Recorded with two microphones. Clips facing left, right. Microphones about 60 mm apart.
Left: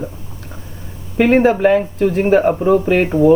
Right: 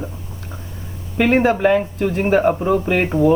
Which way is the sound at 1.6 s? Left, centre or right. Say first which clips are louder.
Left 3 dB; centre.